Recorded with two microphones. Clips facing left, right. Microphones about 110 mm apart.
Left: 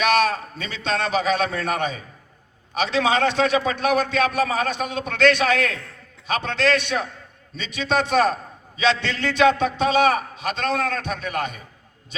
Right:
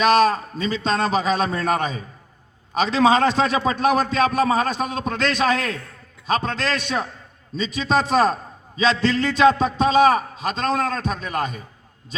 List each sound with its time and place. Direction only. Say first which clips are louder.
0.0 s a man's voice: right 3 dB; 35° right (ahead or behind)